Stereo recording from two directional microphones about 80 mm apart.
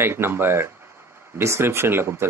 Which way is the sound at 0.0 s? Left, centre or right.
Right.